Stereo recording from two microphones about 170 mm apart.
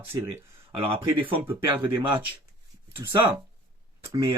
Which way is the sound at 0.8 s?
30° right (ahead or behind).